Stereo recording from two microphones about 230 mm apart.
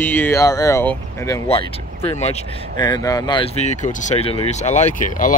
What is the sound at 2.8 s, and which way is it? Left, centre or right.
Speech, centre.